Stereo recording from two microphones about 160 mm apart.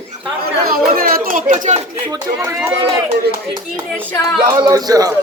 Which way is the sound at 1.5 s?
45° right (ahead or behind).